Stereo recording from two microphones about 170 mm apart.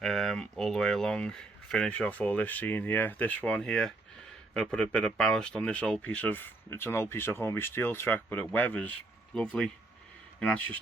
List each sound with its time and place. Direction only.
0.0 s speech: centre (ahead or behind)